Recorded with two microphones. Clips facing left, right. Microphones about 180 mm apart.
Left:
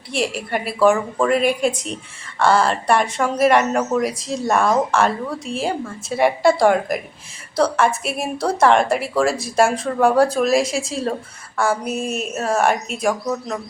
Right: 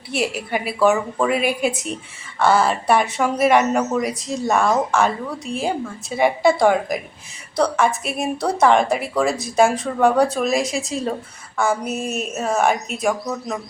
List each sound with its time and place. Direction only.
0.1 s speech: 5° right (ahead or behind)